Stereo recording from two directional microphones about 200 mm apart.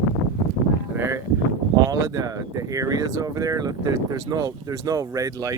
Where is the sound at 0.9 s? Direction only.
15° right (ahead or behind).